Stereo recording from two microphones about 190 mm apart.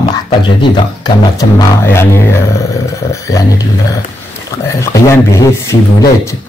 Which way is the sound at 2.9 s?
15° left (ahead or behind).